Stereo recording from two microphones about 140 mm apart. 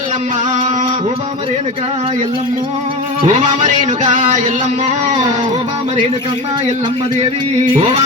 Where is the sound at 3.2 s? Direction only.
55° right (ahead or behind).